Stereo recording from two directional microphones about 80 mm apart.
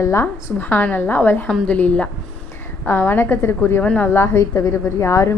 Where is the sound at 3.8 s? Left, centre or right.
Left.